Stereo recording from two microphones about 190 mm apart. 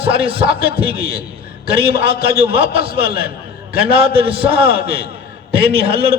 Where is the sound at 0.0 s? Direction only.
30° right (ahead or behind).